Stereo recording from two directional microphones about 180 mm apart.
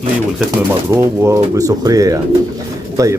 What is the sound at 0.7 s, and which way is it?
Speech, 15° right (ahead or behind).